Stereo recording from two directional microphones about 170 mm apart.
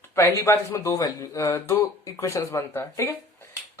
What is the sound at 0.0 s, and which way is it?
Speech, 15° left (ahead or behind).